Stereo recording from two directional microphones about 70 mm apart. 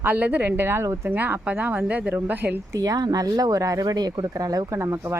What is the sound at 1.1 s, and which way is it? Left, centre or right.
Speech, right.